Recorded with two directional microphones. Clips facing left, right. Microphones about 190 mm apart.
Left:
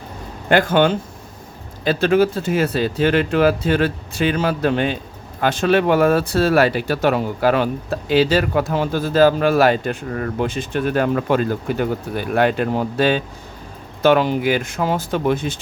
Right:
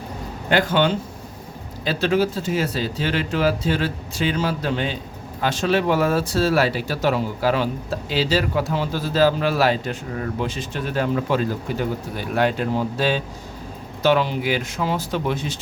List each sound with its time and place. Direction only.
0.4 s speech: 50° left (ahead or behind)